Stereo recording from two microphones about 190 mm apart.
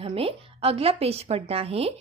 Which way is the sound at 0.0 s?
30° right (ahead or behind).